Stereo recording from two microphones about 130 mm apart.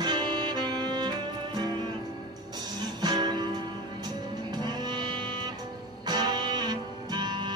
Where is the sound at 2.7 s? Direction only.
30° right (ahead or behind).